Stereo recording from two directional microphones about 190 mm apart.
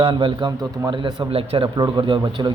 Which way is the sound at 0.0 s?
25° right (ahead or behind).